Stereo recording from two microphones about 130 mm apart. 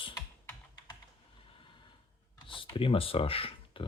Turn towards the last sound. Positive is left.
turn(degrees=45)  # may be behind; listen again after turning